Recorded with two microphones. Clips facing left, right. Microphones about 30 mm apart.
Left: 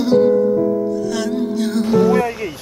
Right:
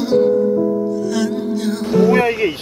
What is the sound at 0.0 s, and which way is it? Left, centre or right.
Music, centre.